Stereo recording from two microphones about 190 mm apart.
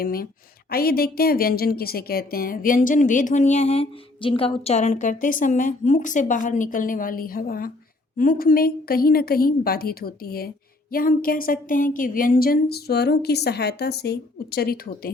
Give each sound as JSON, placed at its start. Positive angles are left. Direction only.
{"t": 0.0, "sound": "a woman's voice", "side_deg": 50}